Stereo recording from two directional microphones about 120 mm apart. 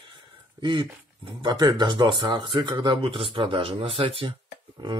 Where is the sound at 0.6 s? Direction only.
40° right (ahead or behind).